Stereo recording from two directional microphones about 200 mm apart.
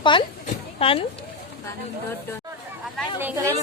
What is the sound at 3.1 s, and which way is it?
Speech, 10° right (ahead or behind).